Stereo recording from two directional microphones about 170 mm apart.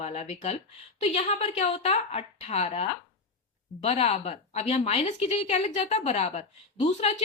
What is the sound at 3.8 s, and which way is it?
A woman's voice, 35° left (ahead or behind).